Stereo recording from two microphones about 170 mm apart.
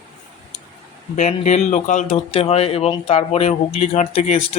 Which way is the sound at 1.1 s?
45° left (ahead or behind).